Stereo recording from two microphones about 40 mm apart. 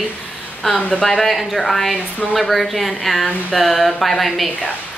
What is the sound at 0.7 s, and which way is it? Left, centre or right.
Speech, left.